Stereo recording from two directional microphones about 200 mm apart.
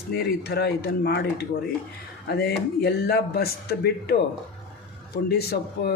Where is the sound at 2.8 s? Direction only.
55° left (ahead or behind).